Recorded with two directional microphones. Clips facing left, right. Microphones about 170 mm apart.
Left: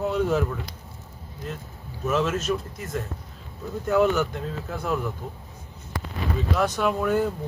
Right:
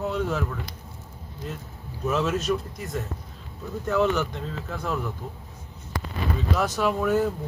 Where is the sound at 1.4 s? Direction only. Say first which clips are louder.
Left 1 dB; centre (ahead or behind).